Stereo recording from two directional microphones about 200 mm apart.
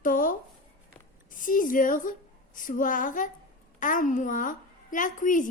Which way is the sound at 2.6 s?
40° left (ahead or behind).